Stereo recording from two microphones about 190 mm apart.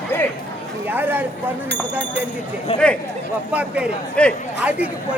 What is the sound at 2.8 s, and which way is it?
Speech, 5° left (ahead or behind).